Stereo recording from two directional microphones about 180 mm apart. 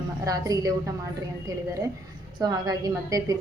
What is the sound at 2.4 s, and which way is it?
Speech, 20° right (ahead or behind).